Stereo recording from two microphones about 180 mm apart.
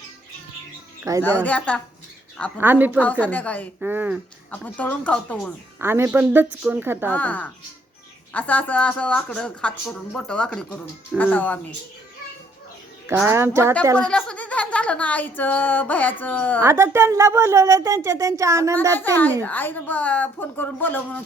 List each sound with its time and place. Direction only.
1.2 s speech: 10° left (ahead or behind)
2.6 s a woman's voice: 10° right (ahead or behind)
3.0 s speech: 10° left (ahead or behind)
3.8 s a woman's voice: 10° right (ahead or behind)
4.5 s speech: 10° left (ahead or behind)
5.8 s a woman's voice: 15° right (ahead or behind)
7.1 s speech: 10° left (ahead or behind)
13.2 s a woman's voice: 15° right (ahead or behind)
13.9 s speech: 5° left (ahead or behind)
16.6 s a woman's voice: 15° right (ahead or behind)
18.9 s speech: 10° left (ahead or behind)